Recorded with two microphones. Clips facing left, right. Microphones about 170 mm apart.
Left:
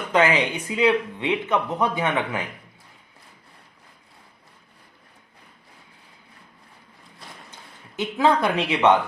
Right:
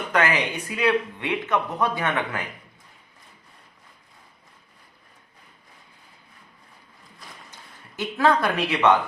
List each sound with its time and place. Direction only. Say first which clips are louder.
0.1 s speech: left 4 dB; 20° left (ahead or behind)
7.9 s speech: left 1 dB; 15° left (ahead or behind)